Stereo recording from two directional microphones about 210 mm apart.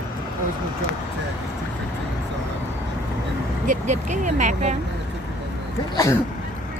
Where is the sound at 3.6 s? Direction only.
35° right (ahead or behind).